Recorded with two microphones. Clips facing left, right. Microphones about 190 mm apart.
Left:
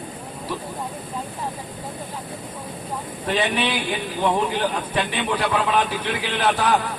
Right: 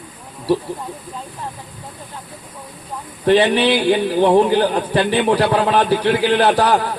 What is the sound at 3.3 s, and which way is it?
A man's voice, 35° right (ahead or behind).